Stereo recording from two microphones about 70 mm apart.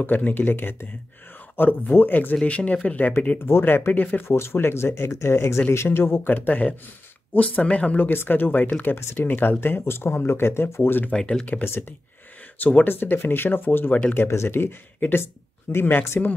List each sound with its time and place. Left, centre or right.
0.0 s speech: left
3.3 s speech: left
4.3 s speech: left
6.3 s speech: left
8.9 s speech: left
11.1 s speech: centre
12.5 s speech: left